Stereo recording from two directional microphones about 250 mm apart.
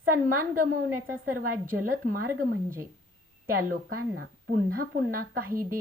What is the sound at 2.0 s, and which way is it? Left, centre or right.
Speech, right.